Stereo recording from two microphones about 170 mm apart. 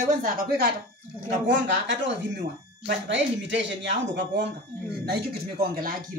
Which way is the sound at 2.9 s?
90° right.